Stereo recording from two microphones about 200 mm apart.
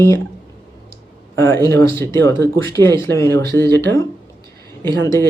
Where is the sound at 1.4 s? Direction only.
10° left (ahead or behind).